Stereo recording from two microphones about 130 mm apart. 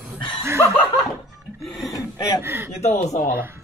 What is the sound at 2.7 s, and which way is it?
Speech, 65° left (ahead or behind).